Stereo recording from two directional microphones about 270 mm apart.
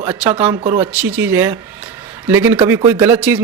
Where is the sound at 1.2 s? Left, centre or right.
Centre.